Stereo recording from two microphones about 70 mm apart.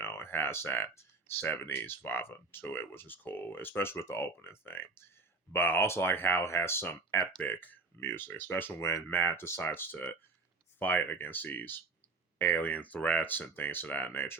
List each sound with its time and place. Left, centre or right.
0.0 s a sound: left
1.4 s speech: left
7.4 s speech: left